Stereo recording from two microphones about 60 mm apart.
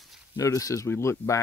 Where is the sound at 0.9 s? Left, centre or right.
Left.